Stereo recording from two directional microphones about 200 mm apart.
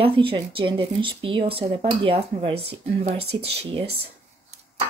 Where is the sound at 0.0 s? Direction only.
25° right (ahead or behind).